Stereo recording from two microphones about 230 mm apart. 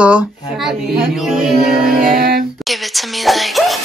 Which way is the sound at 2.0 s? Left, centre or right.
Right.